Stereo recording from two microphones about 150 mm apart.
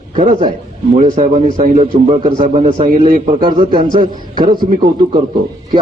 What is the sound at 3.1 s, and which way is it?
Speech, 60° right (ahead or behind).